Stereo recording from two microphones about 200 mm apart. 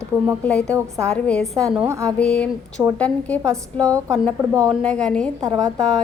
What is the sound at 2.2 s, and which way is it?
A woman's voice, 5° left (ahead or behind).